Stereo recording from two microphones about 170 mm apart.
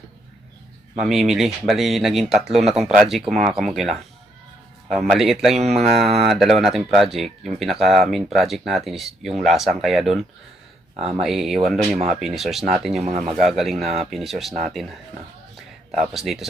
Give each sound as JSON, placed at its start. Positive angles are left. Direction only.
{"t": 0.9, "sound": "speech", "side_deg": 0}
{"t": 13.1, "sound": "speech", "side_deg": -40}
{"t": 13.3, "sound": "speech", "side_deg": 0}
{"t": 15.5, "sound": "a sound", "side_deg": 0}